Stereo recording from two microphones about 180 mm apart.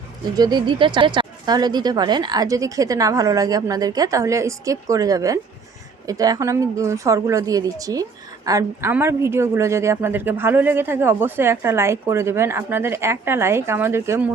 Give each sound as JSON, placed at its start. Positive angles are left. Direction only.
{"t": 0.3, "sound": "speech", "side_deg": -20}